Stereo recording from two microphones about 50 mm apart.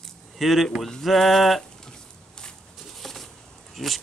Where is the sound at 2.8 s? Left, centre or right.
Centre.